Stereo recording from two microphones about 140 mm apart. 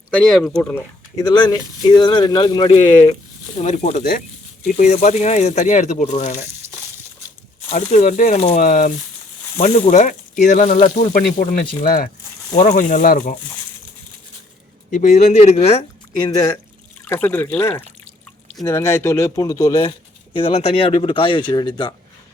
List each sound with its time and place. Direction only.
0.2 s speech: 5° left (ahead or behind)
0.7 s speech: 15° left (ahead or behind)
1.2 s speech: 30° left (ahead or behind)
3.6 s speech: 55° left (ahead or behind)
7.7 s speech: 55° left (ahead or behind)
8.4 s speech: 50° left (ahead or behind)
9.6 s speech: 50° left (ahead or behind); by 12.1 s 90° left
12.5 s speech: 65° left (ahead or behind)
14.8 s speech: 65° left (ahead or behind); by 15.9 s 45° left (ahead or behind)
16.1 s speech: 30° left (ahead or behind)
17.1 s speech: 15° left (ahead or behind)
20.3 s speech: 45° left (ahead or behind)